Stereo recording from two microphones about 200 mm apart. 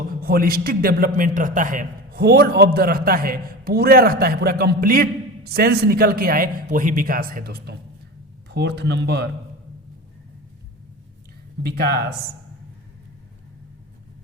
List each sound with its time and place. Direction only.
0.2 s a man's voice: 45° right (ahead or behind)
11.8 s a man's voice: 50° right (ahead or behind)